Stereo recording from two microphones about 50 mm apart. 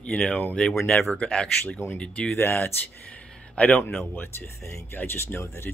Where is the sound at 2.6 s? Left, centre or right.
Left.